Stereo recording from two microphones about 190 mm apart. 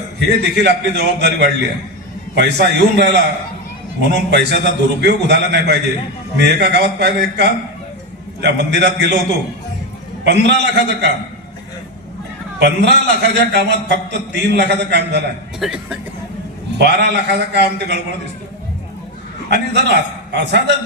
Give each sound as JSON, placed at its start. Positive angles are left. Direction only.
{"t": 0.2, "sound": "a man's voice", "side_deg": -60}
{"t": 10.2, "sound": "a man's voice", "side_deg": -60}
{"t": 12.5, "sound": "a man's voice", "side_deg": -65}
{"t": 15.6, "sound": "speech", "side_deg": -5}
{"t": 16.7, "sound": "a man's voice", "side_deg": -60}
{"t": 19.5, "sound": "a man's voice", "side_deg": -65}